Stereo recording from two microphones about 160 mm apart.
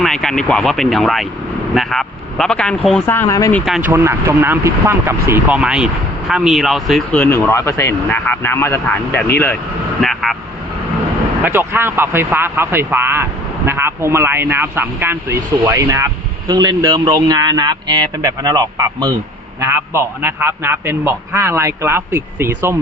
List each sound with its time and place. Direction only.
0.0 s speech: 5° left (ahead or behind)
3.1 s speech: 15° left (ahead or behind)
3.8 s speech: 15° right (ahead or behind); by 9.6 s 10° left (ahead or behind)
10.0 s speech: centre (ahead or behind)
11.4 s a man's voice: 15° right (ahead or behind)
19.5 s a man's voice: 15° right (ahead or behind)